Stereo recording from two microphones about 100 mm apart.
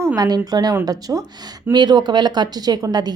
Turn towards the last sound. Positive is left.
turn(degrees=-40)  # may be behind; listen again after turning